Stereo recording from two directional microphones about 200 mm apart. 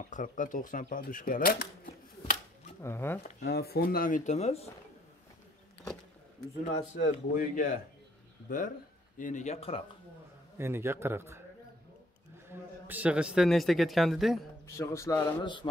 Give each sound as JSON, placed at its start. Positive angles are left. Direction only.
{"t": 0.0, "sound": "speech", "side_deg": 40}
{"t": 2.8, "sound": "speech", "side_deg": 10}
{"t": 3.3, "sound": "speech", "side_deg": 45}
{"t": 6.9, "sound": "speech", "side_deg": 40}
{"t": 10.6, "sound": "a man's voice", "side_deg": -10}
{"t": 12.4, "sound": "a man's voice", "side_deg": -10}
{"t": 14.8, "sound": "speech", "side_deg": 15}